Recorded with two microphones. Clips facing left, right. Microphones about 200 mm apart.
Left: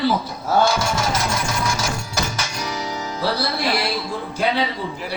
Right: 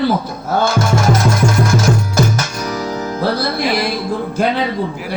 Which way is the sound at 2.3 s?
50° right (ahead or behind).